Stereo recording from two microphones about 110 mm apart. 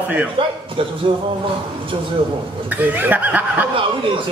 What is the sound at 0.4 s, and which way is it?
Speech, 55° right (ahead or behind).